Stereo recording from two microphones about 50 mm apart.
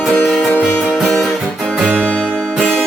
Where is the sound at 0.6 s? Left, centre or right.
Centre.